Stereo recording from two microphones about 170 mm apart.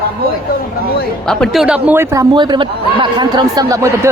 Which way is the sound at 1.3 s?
Centre (ahead or behind).